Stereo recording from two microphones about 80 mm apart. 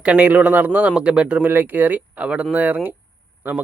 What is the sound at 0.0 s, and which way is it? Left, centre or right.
Speech, centre.